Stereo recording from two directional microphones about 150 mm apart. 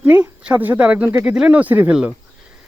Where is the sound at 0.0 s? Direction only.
10° right (ahead or behind).